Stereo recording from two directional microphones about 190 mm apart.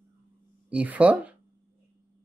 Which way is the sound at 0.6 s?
5° right (ahead or behind).